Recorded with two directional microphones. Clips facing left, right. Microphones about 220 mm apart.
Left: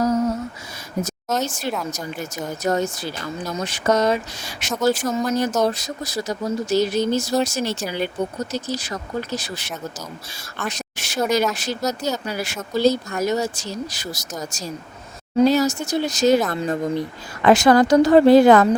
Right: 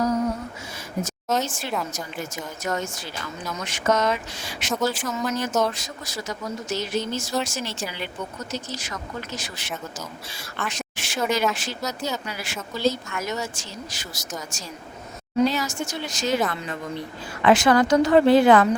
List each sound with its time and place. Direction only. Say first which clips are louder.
1.5 s speech: left 3 dB; 40° left (ahead or behind)
10.7 s a sound: left 3 dB; 40° left (ahead or behind)
11.5 s speech: left 6 dB; 40° left (ahead or behind)